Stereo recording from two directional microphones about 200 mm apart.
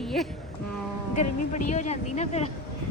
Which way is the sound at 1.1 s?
35° left (ahead or behind).